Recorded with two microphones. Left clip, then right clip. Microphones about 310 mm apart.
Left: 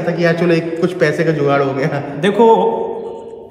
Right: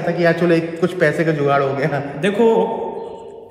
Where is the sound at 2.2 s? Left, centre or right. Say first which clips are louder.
Left 5 dB; centre.